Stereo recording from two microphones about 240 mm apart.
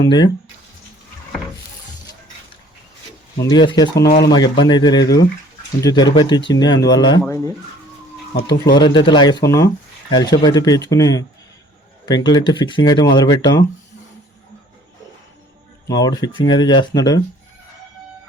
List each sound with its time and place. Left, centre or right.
0.0 s speech: centre
3.3 s speech: centre
8.3 s speech: left
8.6 s speech: centre
15.9 s speech: centre